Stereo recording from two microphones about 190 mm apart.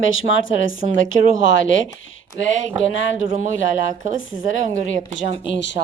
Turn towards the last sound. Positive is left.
turn(degrees=70)  # may be behind; listen again after turning